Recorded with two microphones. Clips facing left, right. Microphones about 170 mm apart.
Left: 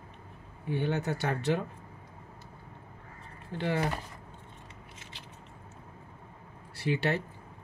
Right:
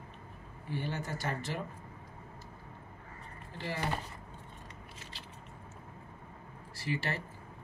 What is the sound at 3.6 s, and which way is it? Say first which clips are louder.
Speech: left 7 dB; 65° left (ahead or behind).